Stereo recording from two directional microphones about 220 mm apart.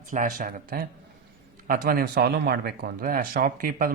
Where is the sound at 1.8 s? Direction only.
45° right (ahead or behind).